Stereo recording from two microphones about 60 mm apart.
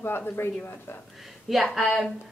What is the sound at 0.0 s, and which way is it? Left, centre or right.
Speech, left.